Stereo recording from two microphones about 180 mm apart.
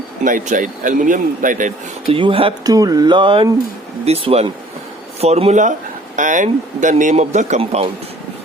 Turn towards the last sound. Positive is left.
turn(degrees=-35)  # may be behind; listen again after turning